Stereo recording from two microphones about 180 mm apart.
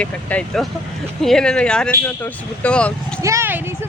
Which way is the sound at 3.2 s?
15° right (ahead or behind).